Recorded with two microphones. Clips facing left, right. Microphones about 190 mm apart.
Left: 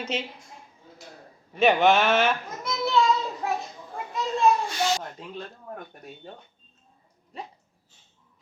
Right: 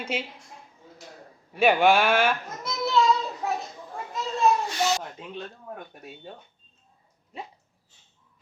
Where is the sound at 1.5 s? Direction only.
10° right (ahead or behind).